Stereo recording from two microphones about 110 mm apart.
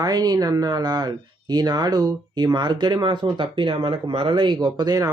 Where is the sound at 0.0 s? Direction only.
35° right (ahead or behind).